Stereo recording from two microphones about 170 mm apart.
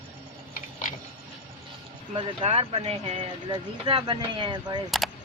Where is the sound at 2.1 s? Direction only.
35° right (ahead or behind).